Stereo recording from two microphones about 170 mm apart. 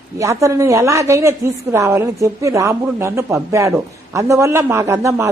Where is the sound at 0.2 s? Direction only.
15° right (ahead or behind).